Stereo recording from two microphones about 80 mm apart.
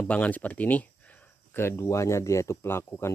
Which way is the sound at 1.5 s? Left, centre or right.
Left.